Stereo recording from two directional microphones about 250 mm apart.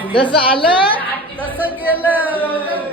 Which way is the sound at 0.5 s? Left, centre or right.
Centre.